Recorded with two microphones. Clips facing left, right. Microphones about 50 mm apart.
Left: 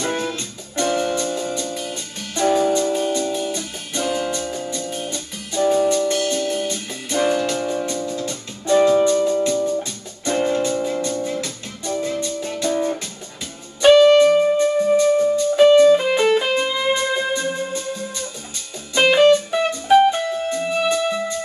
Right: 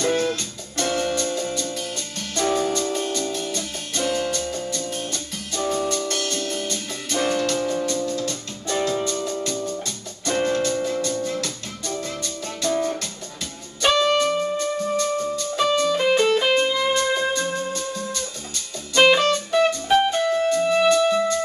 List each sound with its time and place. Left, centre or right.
0.0 s music: centre